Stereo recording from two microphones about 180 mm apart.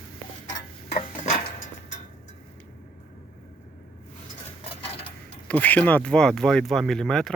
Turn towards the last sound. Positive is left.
turn(degrees=0)  # may be behind; listen again after turning